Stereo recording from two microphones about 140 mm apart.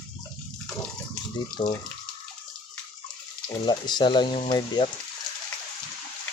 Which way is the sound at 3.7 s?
30° left (ahead or behind).